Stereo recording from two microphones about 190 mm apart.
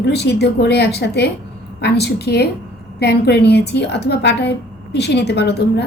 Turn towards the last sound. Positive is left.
turn(degrees=60)  # may be behind; listen again after turning